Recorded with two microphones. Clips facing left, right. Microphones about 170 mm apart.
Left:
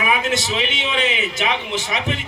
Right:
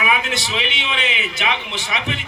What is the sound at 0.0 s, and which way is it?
A man's voice, 45° left (ahead or behind).